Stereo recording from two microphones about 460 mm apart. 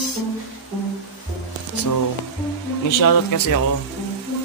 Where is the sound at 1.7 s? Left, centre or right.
Left.